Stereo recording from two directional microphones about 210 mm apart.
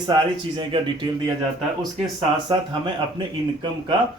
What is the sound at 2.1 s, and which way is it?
Speech, 20° right (ahead or behind).